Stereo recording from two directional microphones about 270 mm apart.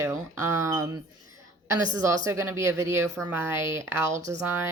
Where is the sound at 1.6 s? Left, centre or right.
Centre.